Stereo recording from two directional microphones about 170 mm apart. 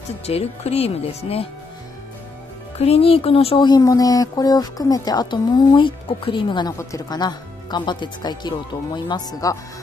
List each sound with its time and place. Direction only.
0.3 s speech: 35° left (ahead or behind)
2.8 s speech: 35° left (ahead or behind)